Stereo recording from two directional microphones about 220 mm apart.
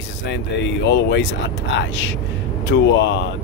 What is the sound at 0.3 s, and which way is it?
Speech, 55° left (ahead or behind).